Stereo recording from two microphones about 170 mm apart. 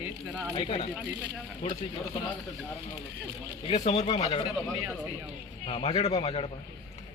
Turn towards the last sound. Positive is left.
turn(degrees=35)  # may be behind; listen again after turning